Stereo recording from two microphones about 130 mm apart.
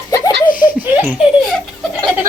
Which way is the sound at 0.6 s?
15° right (ahead or behind).